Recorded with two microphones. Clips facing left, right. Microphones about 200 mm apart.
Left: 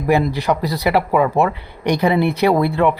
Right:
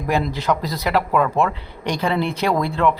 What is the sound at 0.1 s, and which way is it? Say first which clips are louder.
A man's voice: left 4 dB; 15° left (ahead or behind).